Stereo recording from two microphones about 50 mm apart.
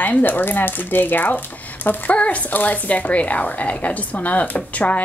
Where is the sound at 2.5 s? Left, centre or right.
Left.